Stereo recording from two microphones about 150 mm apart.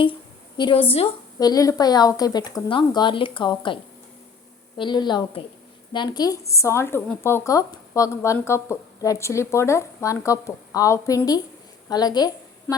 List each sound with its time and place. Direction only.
0.5 s a woman's voice: 35° left (ahead or behind)
1.4 s speech: 25° left (ahead or behind)
4.8 s a woman's voice: 30° left (ahead or behind)